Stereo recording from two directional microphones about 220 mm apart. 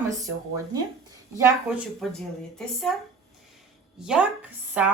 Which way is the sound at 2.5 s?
Centre (ahead or behind).